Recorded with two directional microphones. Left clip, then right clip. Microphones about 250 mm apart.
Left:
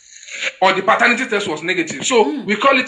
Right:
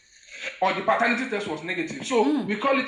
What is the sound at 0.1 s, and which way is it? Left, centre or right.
Speech, left.